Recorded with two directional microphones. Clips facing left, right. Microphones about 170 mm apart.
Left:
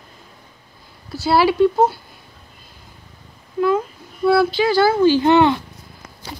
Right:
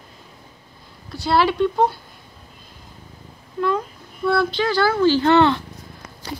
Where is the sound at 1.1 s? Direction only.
5° left (ahead or behind).